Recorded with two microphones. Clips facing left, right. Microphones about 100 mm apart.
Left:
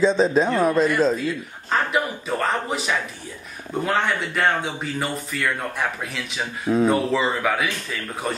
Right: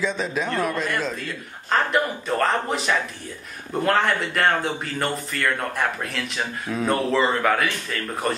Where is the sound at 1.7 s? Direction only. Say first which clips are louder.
Right 1 dB; centre (ahead or behind).